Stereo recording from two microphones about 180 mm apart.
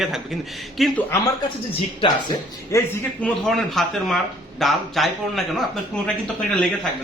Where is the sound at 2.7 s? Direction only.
15° left (ahead or behind).